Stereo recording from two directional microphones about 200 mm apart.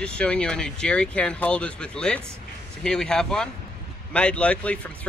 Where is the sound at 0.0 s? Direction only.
5° left (ahead or behind).